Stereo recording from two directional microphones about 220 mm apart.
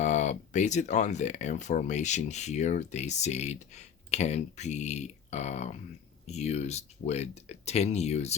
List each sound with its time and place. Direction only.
0.0 s speech: 35° left (ahead or behind)